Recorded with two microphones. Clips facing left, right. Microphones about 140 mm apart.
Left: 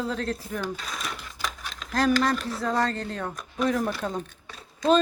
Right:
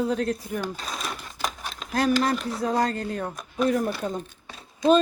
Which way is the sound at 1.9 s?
10° right (ahead or behind).